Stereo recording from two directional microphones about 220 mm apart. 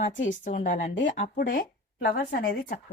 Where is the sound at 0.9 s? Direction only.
55° left (ahead or behind).